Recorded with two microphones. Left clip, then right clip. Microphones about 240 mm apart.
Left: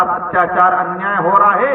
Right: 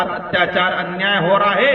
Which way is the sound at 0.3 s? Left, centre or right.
Right.